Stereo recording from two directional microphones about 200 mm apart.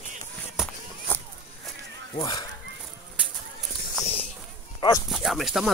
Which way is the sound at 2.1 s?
20° left (ahead or behind).